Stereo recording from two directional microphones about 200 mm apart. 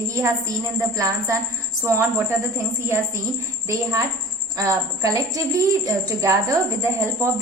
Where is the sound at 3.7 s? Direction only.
15° right (ahead or behind).